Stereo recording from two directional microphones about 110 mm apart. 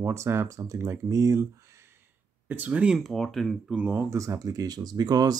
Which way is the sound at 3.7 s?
15° right (ahead or behind).